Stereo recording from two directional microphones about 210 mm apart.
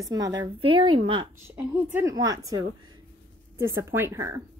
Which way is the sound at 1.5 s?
10° right (ahead or behind).